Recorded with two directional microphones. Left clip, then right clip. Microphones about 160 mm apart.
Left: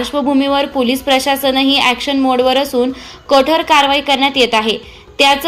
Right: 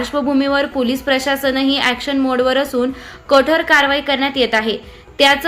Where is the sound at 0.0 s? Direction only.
5° right (ahead or behind).